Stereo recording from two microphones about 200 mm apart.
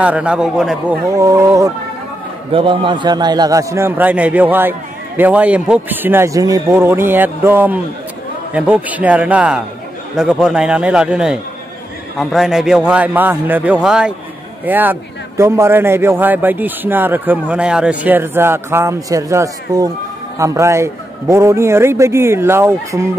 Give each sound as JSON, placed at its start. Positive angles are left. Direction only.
{"t": 0.0, "sound": "speech", "side_deg": -5}
{"t": 1.1, "sound": "a man's voice", "side_deg": -15}